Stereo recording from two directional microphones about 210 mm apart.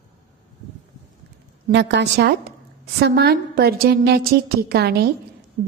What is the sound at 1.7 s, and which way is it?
A woman's voice, 55° right (ahead or behind).